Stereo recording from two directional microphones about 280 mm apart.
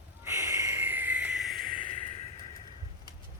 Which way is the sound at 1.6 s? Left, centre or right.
Right.